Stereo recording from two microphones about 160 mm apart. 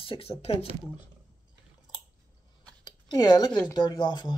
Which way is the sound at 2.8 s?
25° left (ahead or behind).